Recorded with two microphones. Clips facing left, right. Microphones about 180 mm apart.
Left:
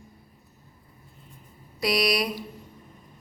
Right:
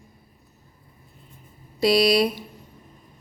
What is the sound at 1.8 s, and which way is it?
Speech, 30° right (ahead or behind).